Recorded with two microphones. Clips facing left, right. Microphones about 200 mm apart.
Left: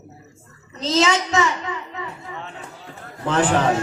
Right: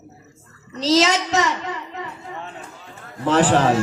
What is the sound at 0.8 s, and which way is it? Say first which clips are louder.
Speech: right 2 dB; 35° right (ahead or behind).